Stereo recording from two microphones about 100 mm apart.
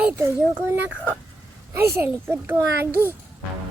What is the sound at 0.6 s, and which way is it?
A child's voice, 20° right (ahead or behind).